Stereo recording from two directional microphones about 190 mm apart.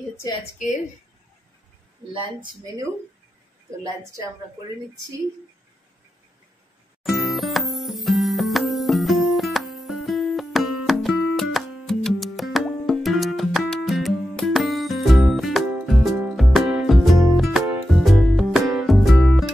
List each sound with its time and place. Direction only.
0.2 s a woman's voice: 25° left (ahead or behind)
2.1 s speech: 25° right (ahead or behind)
3.8 s a woman's voice: 15° right (ahead or behind)
7.0 s music: centre (ahead or behind)